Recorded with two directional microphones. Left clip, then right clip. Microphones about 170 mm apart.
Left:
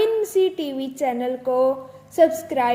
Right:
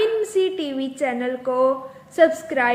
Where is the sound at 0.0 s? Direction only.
30° left (ahead or behind).